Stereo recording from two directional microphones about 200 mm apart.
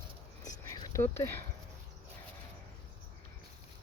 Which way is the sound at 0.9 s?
10° left (ahead or behind).